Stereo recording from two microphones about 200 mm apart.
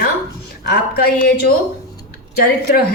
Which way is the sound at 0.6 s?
50° left (ahead or behind).